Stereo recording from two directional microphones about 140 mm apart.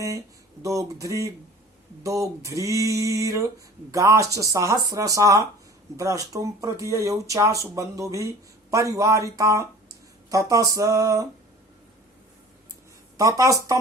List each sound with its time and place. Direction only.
0.6 s speech: 25° right (ahead or behind)
13.1 s speech: 25° right (ahead or behind)